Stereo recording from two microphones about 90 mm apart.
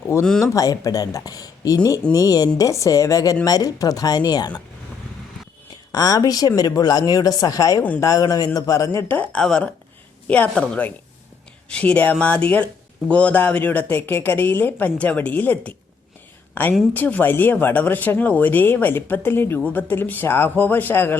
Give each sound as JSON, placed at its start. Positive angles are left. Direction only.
{"t": 0.1, "sound": "speech", "side_deg": 30}
{"t": 5.9, "sound": "speech", "side_deg": 45}
{"t": 7.8, "sound": "speech", "side_deg": 20}
{"t": 8.0, "sound": "speech", "side_deg": 40}
{"t": 9.0, "sound": "a woman's voice", "side_deg": 20}
{"t": 9.4, "sound": "a woman's voice", "side_deg": 5}
{"t": 16.9, "sound": "speech", "side_deg": 20}